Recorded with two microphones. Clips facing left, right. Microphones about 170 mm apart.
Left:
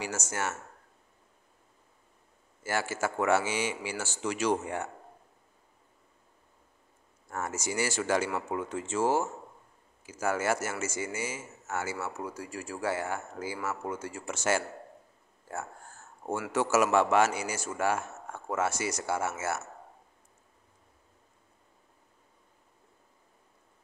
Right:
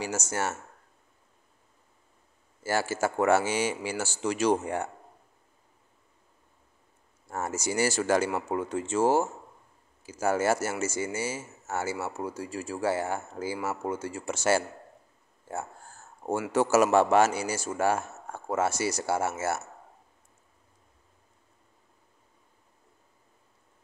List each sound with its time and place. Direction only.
0.0 s speech: 35° right (ahead or behind)
2.6 s speech: 35° right (ahead or behind)
7.2 s speech: 30° right (ahead or behind)
16.5 s speech: 35° right (ahead or behind)